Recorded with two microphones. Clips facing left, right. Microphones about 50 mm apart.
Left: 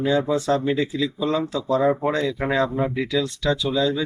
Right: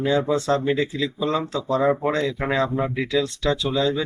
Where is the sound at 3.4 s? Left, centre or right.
Centre.